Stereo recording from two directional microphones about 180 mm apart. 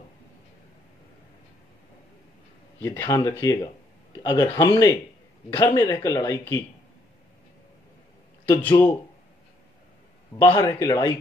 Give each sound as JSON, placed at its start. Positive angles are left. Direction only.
{"t": 2.8, "sound": "speech", "side_deg": 15}
{"t": 5.9, "sound": "speech", "side_deg": 15}
{"t": 8.5, "sound": "speech", "side_deg": 10}
{"t": 10.5, "sound": "speech", "side_deg": 25}